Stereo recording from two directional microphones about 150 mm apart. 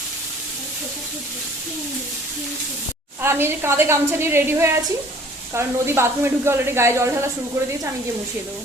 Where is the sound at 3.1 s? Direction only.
15° right (ahead or behind).